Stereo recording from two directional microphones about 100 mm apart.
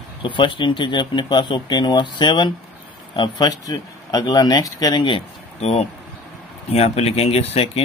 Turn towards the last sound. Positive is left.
turn(degrees=90)